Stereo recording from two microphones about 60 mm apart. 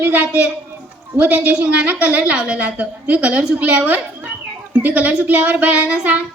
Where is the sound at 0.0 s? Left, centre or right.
Right.